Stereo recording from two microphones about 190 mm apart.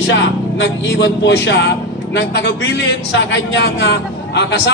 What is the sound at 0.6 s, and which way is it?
A man's voice, 70° left (ahead or behind).